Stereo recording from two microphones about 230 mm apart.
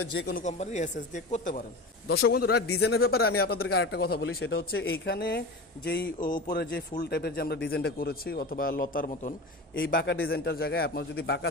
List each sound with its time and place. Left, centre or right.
0.0 s speech: left
0.4 s a man's voice: left
2.0 s speech: left
2.6 s speech: left
3.1 s a man's voice: left